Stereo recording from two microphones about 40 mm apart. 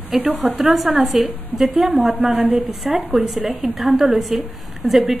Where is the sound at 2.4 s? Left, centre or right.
Right.